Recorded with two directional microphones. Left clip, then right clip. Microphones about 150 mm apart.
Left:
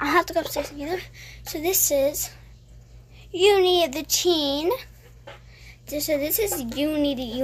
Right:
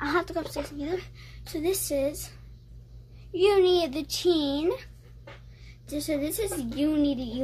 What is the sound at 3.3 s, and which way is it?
A woman's voice, 10° right (ahead or behind).